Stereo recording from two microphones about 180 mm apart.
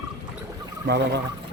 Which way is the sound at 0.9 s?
65° right (ahead or behind).